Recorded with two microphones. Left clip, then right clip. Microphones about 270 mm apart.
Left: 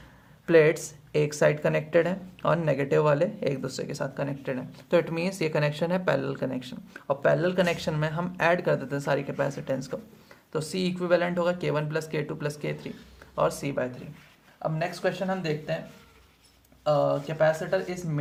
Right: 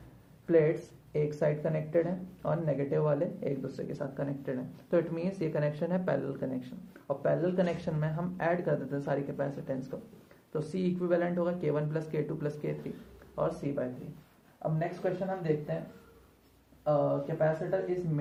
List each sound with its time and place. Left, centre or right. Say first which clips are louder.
0.4 s speech: left 6 dB; left
16.8 s speech: left 4 dB; left